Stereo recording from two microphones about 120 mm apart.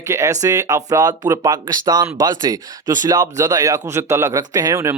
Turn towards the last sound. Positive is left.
turn(degrees=-25)  # may be behind; listen again after turning